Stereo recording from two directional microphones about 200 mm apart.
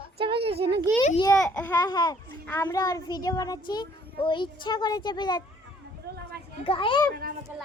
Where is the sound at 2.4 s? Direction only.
10° left (ahead or behind).